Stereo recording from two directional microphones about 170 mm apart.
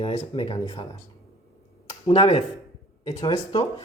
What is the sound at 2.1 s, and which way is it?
Speech, 30° left (ahead or behind).